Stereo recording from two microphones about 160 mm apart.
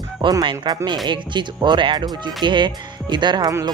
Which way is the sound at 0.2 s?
30° right (ahead or behind).